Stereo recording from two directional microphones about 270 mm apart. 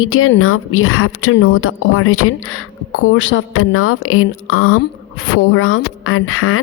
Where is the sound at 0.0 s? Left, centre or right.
Left.